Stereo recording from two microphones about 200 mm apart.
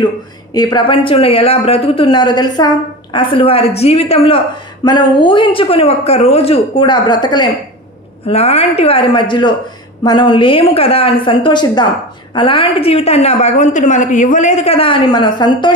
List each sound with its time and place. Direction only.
0.5 s speech: 20° left (ahead or behind)
8.3 s a woman's voice: 30° left (ahead or behind)